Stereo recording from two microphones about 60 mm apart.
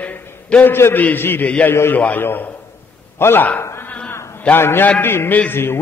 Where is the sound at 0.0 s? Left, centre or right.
Left.